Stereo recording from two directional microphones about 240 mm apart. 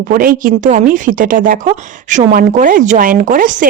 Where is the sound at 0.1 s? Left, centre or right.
Right.